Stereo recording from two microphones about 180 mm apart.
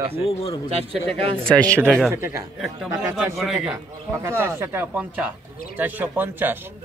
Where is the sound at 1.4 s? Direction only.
5° left (ahead or behind).